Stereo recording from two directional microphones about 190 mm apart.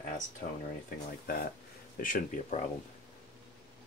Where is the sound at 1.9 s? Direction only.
45° left (ahead or behind).